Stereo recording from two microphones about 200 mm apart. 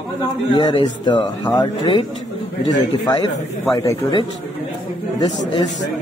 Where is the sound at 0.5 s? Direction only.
20° left (ahead or behind).